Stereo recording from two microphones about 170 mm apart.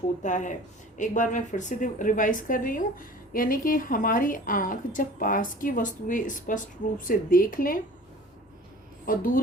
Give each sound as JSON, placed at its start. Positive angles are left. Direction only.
{"t": 0.2, "sound": "a woman's voice", "side_deg": 45}
{"t": 9.0, "sound": "speech", "side_deg": 55}